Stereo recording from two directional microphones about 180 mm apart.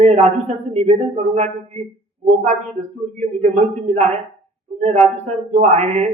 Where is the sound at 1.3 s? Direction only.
40° right (ahead or behind).